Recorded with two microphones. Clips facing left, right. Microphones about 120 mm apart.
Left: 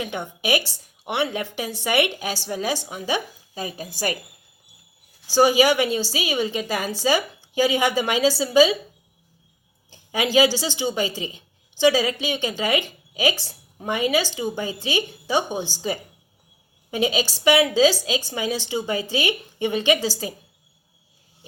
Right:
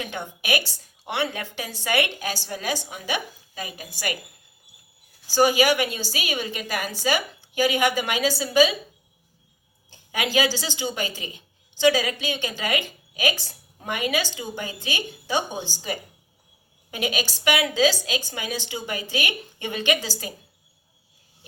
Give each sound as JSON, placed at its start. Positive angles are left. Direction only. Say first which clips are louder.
{"t": 0.0, "sound": "a woman's voice", "louder": "left 4 dB", "side_deg": 25}
{"t": 5.3, "sound": "a woman's voice", "louder": "left 2 dB", "side_deg": 25}
{"t": 9.9, "sound": "a sound", "louder": "left 4 dB", "side_deg": 25}
{"t": 10.3, "sound": "a woman's voice", "louder": "left 6 dB", "side_deg": 25}
{"t": 16.9, "sound": "a woman's voice", "louder": "left 5 dB", "side_deg": 25}